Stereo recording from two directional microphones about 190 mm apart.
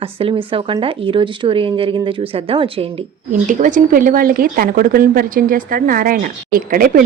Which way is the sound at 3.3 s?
40° right (ahead or behind).